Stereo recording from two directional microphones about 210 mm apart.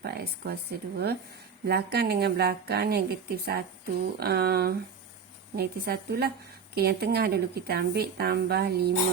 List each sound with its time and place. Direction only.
0.0 s speech: 50° right (ahead or behind)